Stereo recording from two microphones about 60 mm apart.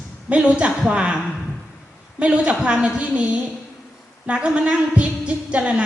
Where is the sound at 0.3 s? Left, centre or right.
Centre.